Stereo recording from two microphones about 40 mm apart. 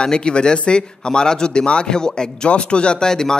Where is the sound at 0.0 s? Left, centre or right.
Left.